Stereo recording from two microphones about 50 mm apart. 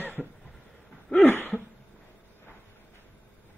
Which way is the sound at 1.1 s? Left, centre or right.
Left.